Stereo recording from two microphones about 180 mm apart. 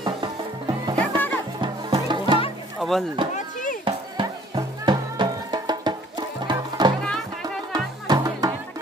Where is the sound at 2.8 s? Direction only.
Centre (ahead or behind).